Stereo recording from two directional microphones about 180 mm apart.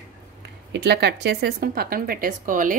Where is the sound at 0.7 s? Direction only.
65° right (ahead or behind); by 2.7 s 50° right (ahead or behind).